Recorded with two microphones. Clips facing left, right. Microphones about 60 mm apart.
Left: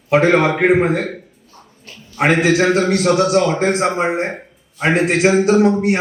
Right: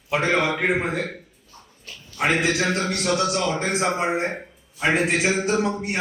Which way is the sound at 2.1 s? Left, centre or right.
Left.